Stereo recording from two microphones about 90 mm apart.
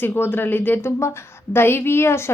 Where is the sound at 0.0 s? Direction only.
25° left (ahead or behind).